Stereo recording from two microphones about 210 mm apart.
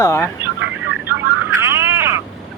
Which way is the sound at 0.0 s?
15° left (ahead or behind).